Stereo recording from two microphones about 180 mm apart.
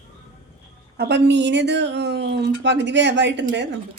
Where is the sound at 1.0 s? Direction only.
70° right (ahead or behind).